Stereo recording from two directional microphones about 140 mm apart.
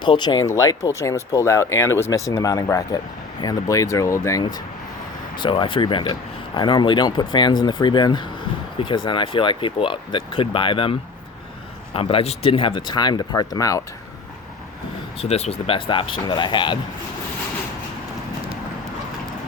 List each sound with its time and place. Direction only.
0.0 s speech: 35° left (ahead or behind)
5.4 s speech: 35° left (ahead or behind)
11.9 s speech: 40° left (ahead or behind); by 13.8 s 25° left (ahead or behind)
15.2 s speech: 50° left (ahead or behind)